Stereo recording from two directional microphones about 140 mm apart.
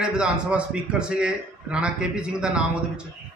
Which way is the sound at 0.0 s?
5° right (ahead or behind).